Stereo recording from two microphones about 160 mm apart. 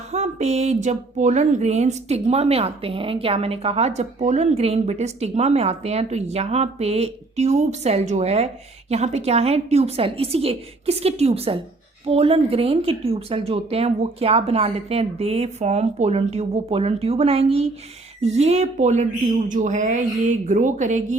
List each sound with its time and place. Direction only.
0.1 s speech: 45° right (ahead or behind)